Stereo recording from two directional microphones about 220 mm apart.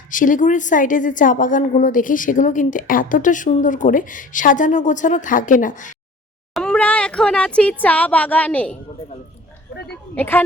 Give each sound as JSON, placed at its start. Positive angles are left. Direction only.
{"t": 0.1, "sound": "a woman's voice", "side_deg": 35}
{"t": 6.5, "sound": "speech", "side_deg": 5}
{"t": 10.2, "sound": "a woman's voice", "side_deg": 10}